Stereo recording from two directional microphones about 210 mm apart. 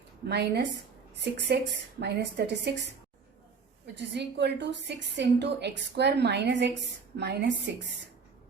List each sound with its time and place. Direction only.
0.3 s a woman's voice: 55° right (ahead or behind)
3.9 s a woman's voice: 55° right (ahead or behind)